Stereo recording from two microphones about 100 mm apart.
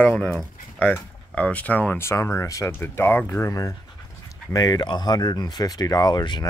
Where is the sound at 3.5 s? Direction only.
35° left (ahead or behind).